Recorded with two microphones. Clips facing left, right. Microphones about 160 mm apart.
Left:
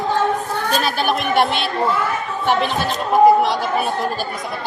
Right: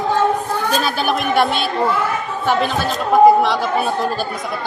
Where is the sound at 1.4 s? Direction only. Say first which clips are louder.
Right 1 dB; 40° right (ahead or behind).